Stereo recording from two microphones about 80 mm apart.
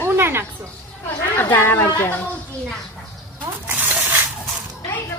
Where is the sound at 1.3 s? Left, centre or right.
Left.